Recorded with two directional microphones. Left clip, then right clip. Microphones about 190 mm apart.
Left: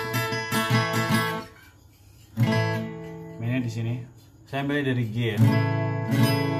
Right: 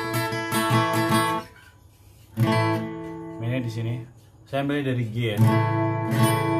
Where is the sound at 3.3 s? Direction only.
5° right (ahead or behind).